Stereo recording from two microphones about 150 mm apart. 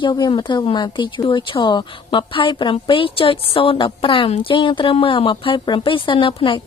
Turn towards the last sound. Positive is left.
turn(degrees=35)  # may be behind; listen again after turning